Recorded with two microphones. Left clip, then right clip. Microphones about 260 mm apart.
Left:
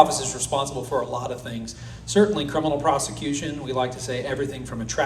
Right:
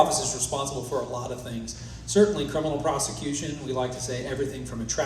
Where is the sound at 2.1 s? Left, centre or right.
Centre.